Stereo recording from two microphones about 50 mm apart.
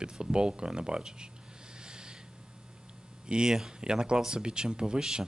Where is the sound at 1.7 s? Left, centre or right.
Centre.